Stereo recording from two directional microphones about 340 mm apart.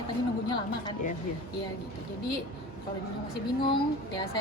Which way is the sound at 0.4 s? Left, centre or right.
Centre.